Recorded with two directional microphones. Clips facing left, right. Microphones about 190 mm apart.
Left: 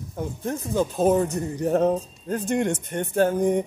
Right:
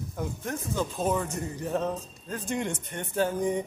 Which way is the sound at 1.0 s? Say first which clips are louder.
Left 10 dB; 40° left (ahead or behind).